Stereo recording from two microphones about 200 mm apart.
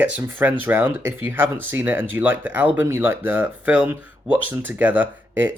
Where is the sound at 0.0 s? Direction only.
10° right (ahead or behind).